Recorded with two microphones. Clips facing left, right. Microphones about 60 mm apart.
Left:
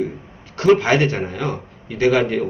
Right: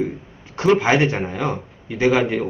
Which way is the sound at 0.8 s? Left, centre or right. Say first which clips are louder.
Even; centre.